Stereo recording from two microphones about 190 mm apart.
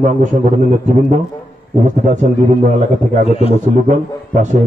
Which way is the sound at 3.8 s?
40° right (ahead or behind).